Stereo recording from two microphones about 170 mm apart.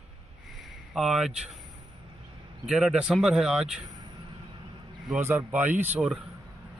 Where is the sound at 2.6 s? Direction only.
5° right (ahead or behind).